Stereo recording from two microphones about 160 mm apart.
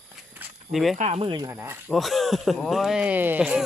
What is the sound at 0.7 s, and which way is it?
Speech, centre (ahead or behind).